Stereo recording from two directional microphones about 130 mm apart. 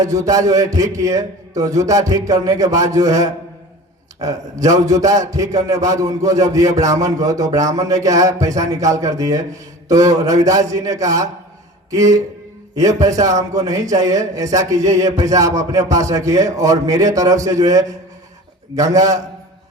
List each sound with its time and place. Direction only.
0.0 s a man's voice: 25° right (ahead or behind)